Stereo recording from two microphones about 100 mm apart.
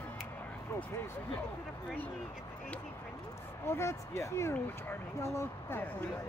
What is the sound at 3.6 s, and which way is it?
Speech, 25° left (ahead or behind).